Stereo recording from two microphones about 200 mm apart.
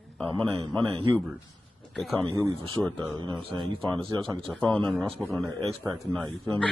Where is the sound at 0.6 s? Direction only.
25° right (ahead or behind).